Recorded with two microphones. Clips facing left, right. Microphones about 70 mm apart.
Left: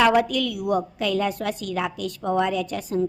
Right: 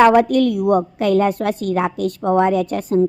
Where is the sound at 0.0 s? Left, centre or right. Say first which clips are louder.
Right 7 dB; right.